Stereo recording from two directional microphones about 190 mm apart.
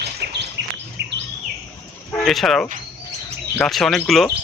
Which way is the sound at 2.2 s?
Centre (ahead or behind).